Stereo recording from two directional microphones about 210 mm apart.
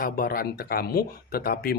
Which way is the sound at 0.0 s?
45° left (ahead or behind).